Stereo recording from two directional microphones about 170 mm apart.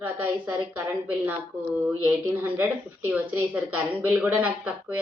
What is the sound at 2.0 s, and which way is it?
Speech, 10° right (ahead or behind).